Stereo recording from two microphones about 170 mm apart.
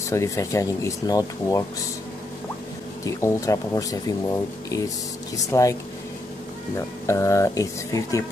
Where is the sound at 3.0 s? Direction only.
15° left (ahead or behind).